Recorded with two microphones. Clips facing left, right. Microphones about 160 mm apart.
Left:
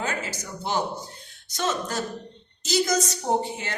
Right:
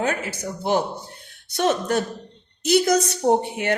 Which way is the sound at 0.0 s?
60° right (ahead or behind).